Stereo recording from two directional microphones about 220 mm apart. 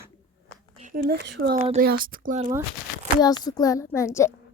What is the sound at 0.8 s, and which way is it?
Speech, 40° right (ahead or behind).